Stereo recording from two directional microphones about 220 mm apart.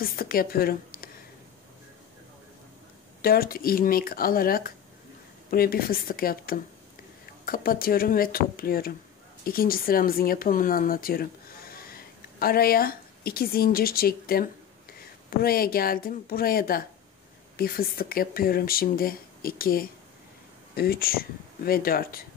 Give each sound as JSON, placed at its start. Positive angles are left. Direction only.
{"t": 0.0, "sound": "a woman's voice", "side_deg": 40}
{"t": 3.2, "sound": "a woman's voice", "side_deg": 40}